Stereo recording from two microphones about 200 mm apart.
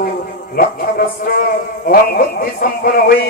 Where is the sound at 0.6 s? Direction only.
45° left (ahead or behind).